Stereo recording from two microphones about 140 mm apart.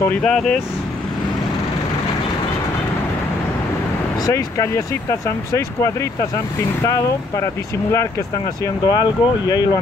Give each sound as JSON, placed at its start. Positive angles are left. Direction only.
{"t": 0.2, "sound": "speech", "side_deg": 5}
{"t": 4.3, "sound": "speech", "side_deg": 20}
{"t": 8.8, "sound": "speech", "side_deg": 30}